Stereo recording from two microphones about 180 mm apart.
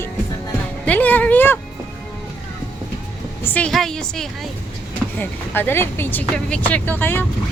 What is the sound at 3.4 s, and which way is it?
A woman's voice, 5° left (ahead or behind).